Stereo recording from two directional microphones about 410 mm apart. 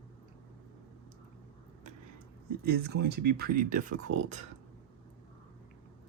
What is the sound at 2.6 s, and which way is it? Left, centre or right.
Speech, right.